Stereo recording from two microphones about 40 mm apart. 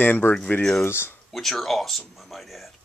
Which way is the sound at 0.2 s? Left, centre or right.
Left.